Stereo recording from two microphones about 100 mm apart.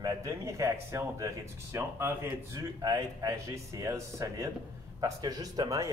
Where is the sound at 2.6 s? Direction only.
40° right (ahead or behind).